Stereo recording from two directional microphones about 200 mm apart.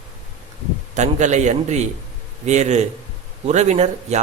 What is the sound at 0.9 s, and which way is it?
A man's voice, 35° right (ahead or behind).